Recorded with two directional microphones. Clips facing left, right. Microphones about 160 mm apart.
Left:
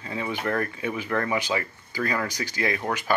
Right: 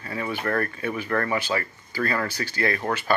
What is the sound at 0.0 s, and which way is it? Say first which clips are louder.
Speech: even; 15° left (ahead or behind).